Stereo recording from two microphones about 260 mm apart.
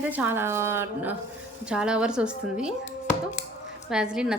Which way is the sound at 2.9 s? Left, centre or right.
Left.